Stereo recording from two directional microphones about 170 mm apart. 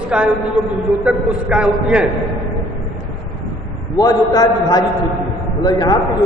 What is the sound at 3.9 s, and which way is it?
A man's voice, 20° left (ahead or behind).